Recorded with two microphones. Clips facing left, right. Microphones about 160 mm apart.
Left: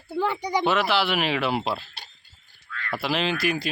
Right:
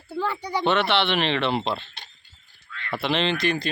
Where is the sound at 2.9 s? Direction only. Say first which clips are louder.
Right 2 dB; 5° left (ahead or behind).